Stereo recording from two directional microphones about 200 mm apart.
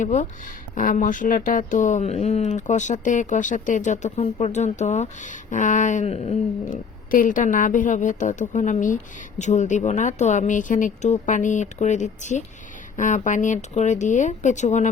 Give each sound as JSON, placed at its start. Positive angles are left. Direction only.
{"t": 0.0, "sound": "speech", "side_deg": 40}